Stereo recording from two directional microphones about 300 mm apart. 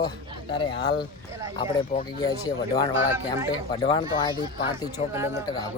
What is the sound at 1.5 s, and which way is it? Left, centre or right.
Speech, centre.